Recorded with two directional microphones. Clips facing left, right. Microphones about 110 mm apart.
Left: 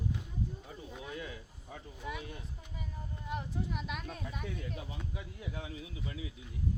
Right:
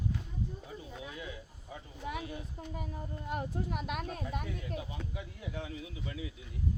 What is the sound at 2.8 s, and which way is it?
Speech, 50° right (ahead or behind).